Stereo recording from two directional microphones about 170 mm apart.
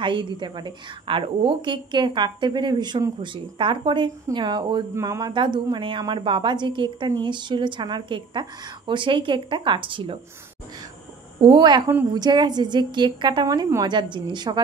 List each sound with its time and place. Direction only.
0.0 s a woman's voice: 30° right (ahead or behind)
11.4 s a woman's voice: 25° right (ahead or behind)